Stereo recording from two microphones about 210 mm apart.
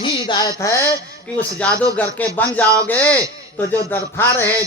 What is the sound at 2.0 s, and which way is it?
A man's voice, 5° left (ahead or behind).